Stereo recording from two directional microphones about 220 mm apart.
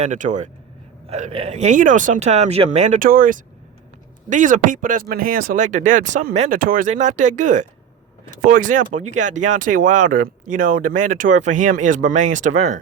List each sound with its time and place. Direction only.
0.0 s speech: 35° right (ahead or behind)